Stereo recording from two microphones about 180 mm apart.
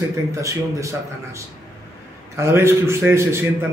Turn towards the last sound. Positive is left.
turn(degrees=-15)  # may be behind; listen again after turning